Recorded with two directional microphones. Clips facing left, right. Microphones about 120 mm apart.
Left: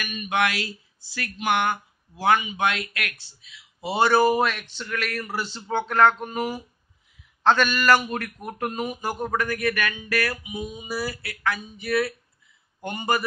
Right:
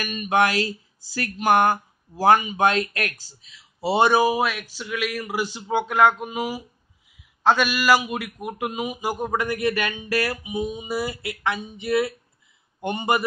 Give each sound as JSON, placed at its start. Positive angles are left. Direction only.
{"t": 0.0, "sound": "speech", "side_deg": -35}
{"t": 3.9, "sound": "a man's voice", "side_deg": -15}